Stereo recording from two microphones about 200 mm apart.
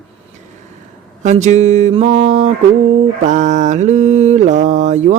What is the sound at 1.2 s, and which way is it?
Mantra, 35° right (ahead or behind).